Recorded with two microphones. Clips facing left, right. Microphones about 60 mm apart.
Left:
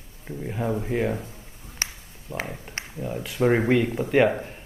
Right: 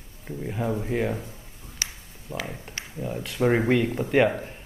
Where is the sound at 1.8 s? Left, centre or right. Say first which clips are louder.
Left 2 dB; left.